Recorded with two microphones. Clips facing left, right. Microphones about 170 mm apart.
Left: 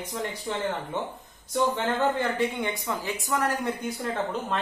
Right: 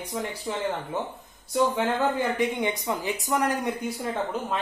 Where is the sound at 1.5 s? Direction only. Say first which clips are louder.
Right 2 dB; 5° right (ahead or behind).